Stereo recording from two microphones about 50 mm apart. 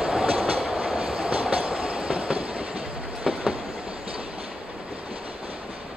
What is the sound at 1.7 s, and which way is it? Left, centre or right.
Train, right.